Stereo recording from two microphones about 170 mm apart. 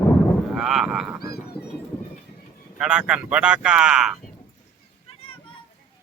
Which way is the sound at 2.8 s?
5° right (ahead or behind).